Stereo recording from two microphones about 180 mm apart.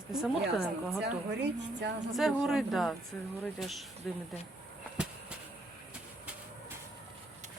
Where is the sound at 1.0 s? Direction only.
70° right (ahead or behind).